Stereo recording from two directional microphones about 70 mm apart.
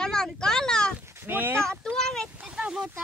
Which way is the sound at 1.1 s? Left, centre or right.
Right.